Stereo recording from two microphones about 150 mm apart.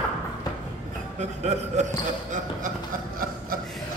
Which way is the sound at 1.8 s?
50° right (ahead or behind).